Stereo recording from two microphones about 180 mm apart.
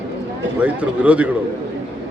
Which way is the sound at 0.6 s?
10° right (ahead or behind).